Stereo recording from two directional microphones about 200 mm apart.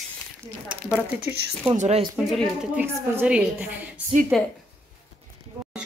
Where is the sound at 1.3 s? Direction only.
10° right (ahead or behind).